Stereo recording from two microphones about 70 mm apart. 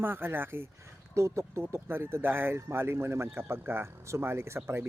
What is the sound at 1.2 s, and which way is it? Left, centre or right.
Speech, right.